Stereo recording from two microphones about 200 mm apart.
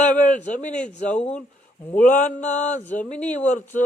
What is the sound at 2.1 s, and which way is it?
Speech, 40° left (ahead or behind).